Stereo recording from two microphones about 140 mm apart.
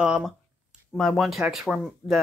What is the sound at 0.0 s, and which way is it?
Speech, 5° right (ahead or behind).